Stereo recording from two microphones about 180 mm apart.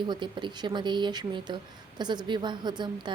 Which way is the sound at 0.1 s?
25° right (ahead or behind).